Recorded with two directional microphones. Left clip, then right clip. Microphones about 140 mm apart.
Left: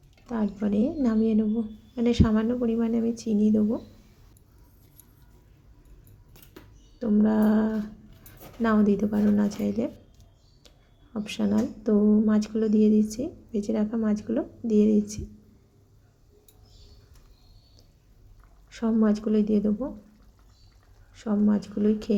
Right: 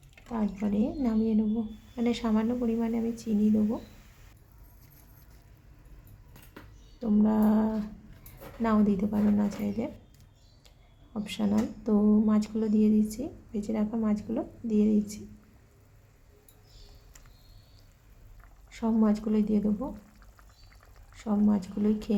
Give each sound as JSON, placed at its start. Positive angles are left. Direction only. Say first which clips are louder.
{"t": 0.3, "sound": "a woman's voice", "louder": "left 3 dB", "side_deg": 20}
{"t": 7.0, "sound": "speech", "louder": "left 3 dB", "side_deg": 15}
{"t": 11.1, "sound": "speech", "louder": "left 3 dB", "side_deg": 15}
{"t": 18.7, "sound": "speech", "louder": "left 3 dB", "side_deg": 15}
{"t": 21.2, "sound": "speech", "louder": "left 2 dB", "side_deg": 15}